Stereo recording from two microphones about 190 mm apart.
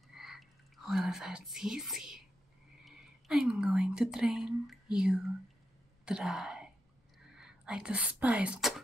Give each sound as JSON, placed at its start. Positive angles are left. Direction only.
{"t": 0.1, "sound": "whispering", "side_deg": 0}
{"t": 2.8, "sound": "speech", "side_deg": -5}